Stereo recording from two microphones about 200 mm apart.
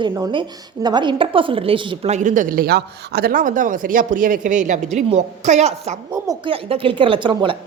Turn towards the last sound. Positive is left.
turn(degrees=-25)  # may be behind; listen again after turning